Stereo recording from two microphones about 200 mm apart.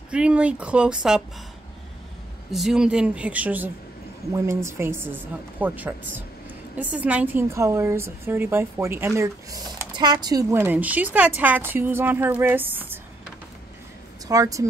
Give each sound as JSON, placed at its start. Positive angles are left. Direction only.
{"t": 0.1, "sound": "speech", "side_deg": -5}
{"t": 2.5, "sound": "a woman's voice", "side_deg": 0}
{"t": 14.2, "sound": "a woman's voice", "side_deg": -15}